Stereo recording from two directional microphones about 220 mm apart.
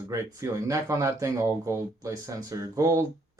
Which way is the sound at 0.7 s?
15° right (ahead or behind).